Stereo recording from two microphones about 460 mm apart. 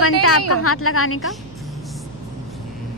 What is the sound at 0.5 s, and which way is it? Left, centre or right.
Speech, left.